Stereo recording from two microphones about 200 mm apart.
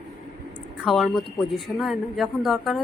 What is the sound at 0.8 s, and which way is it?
A woman's voice, centre (ahead or behind).